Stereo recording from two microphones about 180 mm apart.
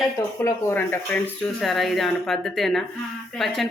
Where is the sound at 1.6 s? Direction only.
Centre (ahead or behind).